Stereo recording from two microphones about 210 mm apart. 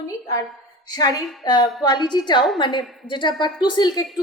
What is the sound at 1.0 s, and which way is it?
A woman's voice, 20° left (ahead or behind).